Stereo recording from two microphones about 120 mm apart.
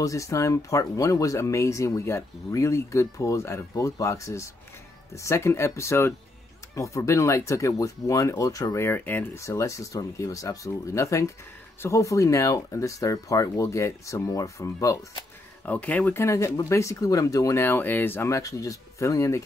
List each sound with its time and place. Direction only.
0.0 s speech: 25° left (ahead or behind)
8.8 s speech: 15° left (ahead or behind)
15.6 s speech: 10° left (ahead or behind)